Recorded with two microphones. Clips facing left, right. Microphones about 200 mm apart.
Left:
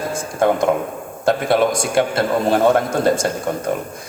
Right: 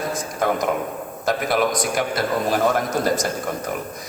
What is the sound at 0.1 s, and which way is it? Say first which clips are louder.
A man's voice: left 8 dB; 30° left (ahead or behind).